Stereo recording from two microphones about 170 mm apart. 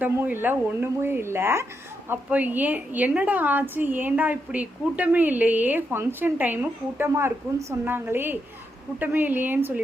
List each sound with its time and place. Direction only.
0.0 s a woman's voice: 10° right (ahead or behind)